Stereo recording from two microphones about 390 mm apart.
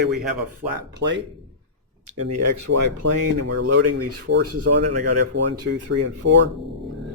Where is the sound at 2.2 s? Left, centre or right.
Right.